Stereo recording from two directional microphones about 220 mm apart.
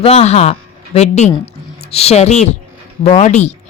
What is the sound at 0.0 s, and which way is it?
A woman's voice, 30° left (ahead or behind).